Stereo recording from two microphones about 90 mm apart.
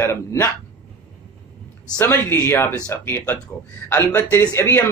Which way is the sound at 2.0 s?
25° left (ahead or behind).